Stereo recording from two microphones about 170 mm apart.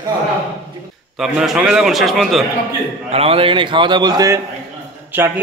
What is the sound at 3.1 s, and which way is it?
A man's voice, 35° right (ahead or behind).